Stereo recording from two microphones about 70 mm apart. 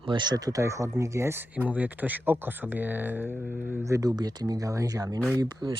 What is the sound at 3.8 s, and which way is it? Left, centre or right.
Speech, right.